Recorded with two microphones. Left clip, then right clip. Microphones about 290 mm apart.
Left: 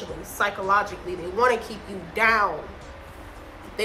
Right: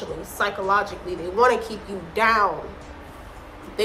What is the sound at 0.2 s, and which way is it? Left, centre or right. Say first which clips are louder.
A woman's voice: even; centre.